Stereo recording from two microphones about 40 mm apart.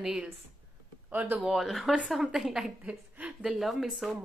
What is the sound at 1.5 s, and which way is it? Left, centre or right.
Speech, centre.